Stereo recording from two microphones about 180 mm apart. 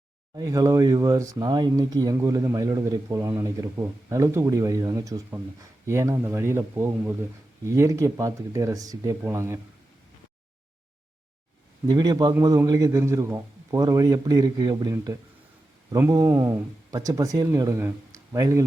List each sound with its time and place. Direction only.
0.3 s speech: 20° right (ahead or behind)
11.9 s speech: 20° right (ahead or behind)